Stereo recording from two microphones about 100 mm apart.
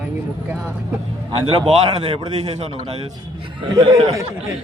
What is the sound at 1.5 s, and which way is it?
Speech, 70° right (ahead or behind).